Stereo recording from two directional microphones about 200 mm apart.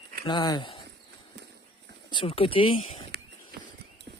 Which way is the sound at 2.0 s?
25° left (ahead or behind).